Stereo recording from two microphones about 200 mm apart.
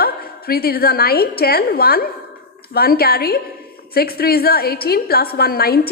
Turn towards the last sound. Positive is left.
turn(degrees=50)  # may be behind; listen again after turning